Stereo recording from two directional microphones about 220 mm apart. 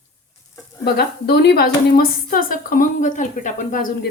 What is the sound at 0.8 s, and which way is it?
A woman's voice, 45° left (ahead or behind).